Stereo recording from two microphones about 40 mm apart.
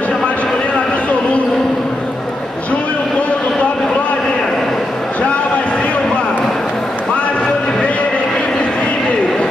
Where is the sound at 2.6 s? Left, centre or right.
Left.